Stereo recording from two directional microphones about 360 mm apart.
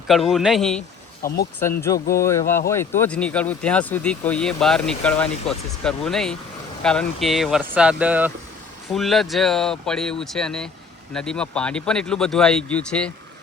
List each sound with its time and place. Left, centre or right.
0.1 s speech: centre
1.2 s speech: left
2.1 s speech: centre